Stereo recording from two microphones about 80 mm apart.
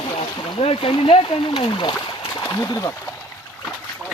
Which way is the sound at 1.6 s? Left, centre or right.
Left.